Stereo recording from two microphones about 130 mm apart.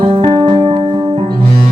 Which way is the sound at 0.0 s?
40° right (ahead or behind).